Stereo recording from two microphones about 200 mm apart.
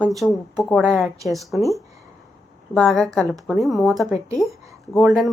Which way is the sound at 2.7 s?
5° left (ahead or behind).